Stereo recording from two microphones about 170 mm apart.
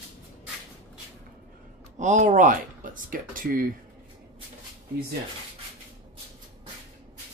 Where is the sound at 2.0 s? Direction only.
45° right (ahead or behind).